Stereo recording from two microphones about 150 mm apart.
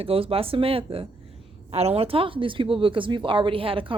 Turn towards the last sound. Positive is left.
turn(degrees=-35)  # may be behind; listen again after turning